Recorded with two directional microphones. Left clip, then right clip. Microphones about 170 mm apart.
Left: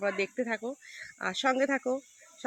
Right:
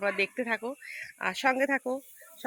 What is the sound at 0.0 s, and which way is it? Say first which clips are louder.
Speech: right 2 dB; 20° left (ahead or behind).